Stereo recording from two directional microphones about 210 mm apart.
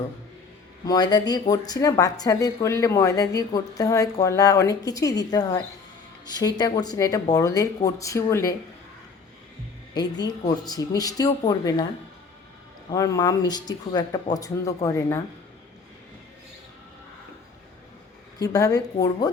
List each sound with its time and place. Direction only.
0.9 s a woman's voice: 20° left (ahead or behind)
9.9 s a woman's voice: 20° left (ahead or behind)
12.9 s a woman's voice: 15° left (ahead or behind)
18.4 s a woman's voice: 15° left (ahead or behind)